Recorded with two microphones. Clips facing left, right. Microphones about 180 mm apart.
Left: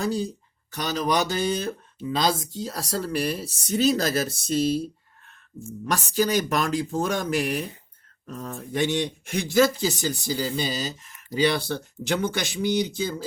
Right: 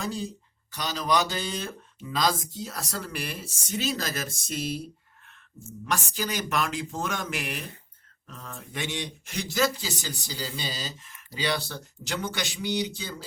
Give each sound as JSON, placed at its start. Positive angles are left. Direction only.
{"t": 0.0, "sound": "speech", "side_deg": 35}
{"t": 0.7, "sound": "speech", "side_deg": 50}
{"t": 2.0, "sound": "speech", "side_deg": 25}
{"t": 5.8, "sound": "speech", "side_deg": 40}